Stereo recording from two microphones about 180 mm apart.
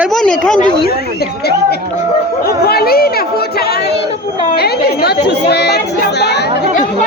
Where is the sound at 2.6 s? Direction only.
60° left (ahead or behind).